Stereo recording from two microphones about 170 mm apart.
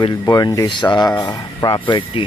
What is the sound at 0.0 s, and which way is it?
Speech, 20° left (ahead or behind).